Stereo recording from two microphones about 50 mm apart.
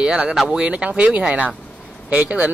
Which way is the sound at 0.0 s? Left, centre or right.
Centre.